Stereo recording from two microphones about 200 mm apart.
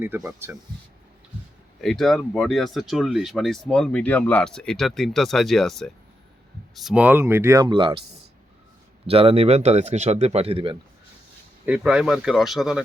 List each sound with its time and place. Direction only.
0.0 s speech: 10° right (ahead or behind)
1.8 s speech: centre (ahead or behind); by 8.0 s 25° right (ahead or behind)
9.0 s speech: 30° right (ahead or behind)
11.6 s speech: 5° right (ahead or behind)